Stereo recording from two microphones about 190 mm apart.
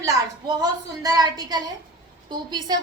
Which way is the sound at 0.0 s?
20° right (ahead or behind).